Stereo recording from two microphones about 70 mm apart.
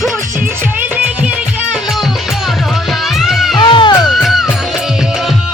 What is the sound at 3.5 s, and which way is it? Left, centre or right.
Music, left.